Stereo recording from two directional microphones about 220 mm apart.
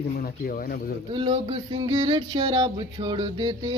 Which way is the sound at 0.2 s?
40° left (ahead or behind).